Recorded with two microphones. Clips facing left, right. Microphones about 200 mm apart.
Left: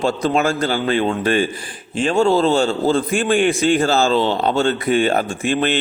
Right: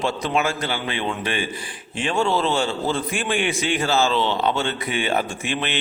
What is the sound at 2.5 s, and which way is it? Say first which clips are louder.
A man's voice: left 6 dB; 45° left (ahead or behind).